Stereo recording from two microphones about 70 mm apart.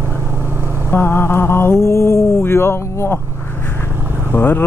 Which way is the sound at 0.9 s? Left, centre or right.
Left.